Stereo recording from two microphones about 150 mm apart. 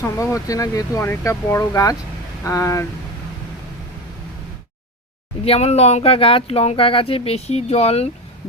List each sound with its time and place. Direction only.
0.0 s speech: 20° left (ahead or behind)
5.5 s speech: 45° left (ahead or behind)